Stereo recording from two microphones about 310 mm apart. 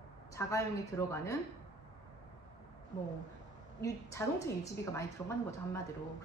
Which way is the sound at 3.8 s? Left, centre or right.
Centre.